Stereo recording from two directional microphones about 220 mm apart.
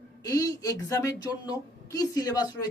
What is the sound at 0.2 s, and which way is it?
A woman's voice, 15° left (ahead or behind).